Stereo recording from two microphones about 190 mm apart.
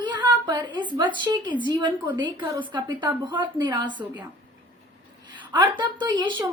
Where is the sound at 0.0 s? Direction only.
25° right (ahead or behind).